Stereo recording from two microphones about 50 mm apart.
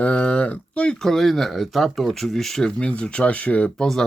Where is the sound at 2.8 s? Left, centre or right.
Left.